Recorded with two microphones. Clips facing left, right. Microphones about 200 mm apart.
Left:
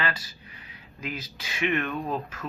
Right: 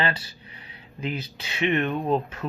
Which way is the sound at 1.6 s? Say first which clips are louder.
Right 4 dB; 25° right (ahead or behind).